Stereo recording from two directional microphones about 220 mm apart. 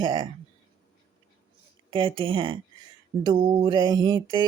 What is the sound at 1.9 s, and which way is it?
Speech, 25° right (ahead or behind).